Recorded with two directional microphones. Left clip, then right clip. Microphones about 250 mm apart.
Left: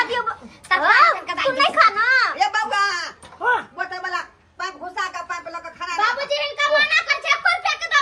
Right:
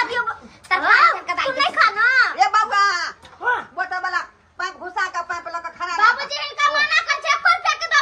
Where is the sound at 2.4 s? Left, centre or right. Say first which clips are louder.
Right 3 dB; centre.